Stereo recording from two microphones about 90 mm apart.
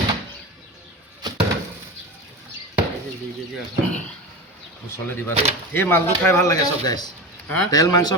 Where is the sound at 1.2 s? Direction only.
50° right (ahead or behind).